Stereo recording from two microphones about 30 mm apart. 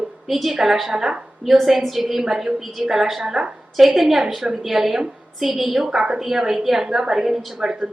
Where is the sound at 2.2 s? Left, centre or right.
Centre.